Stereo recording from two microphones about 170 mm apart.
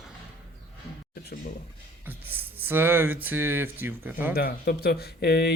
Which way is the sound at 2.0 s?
10° right (ahead or behind).